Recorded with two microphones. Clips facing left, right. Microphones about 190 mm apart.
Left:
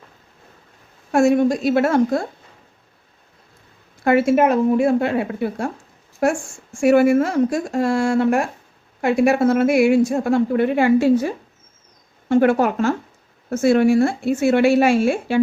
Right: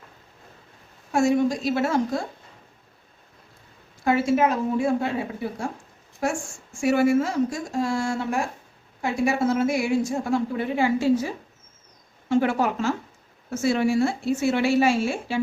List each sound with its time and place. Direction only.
1.1 s a woman's voice: 60° left (ahead or behind)
4.0 s a woman's voice: 60° left (ahead or behind)